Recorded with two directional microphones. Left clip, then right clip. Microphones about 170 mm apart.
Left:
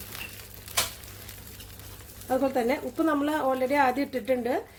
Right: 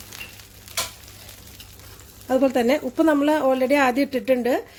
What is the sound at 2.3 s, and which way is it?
A woman's voice, 45° right (ahead or behind).